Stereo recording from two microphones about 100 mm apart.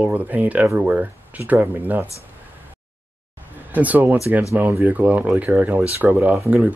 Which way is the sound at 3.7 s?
15° right (ahead or behind).